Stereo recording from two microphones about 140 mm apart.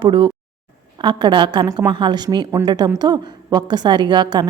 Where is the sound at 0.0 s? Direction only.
35° right (ahead or behind).